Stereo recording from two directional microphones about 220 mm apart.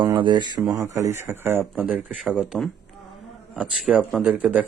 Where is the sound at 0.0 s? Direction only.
20° right (ahead or behind).